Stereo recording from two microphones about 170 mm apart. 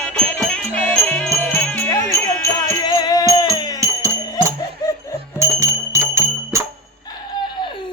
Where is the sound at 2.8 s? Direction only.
25° left (ahead or behind).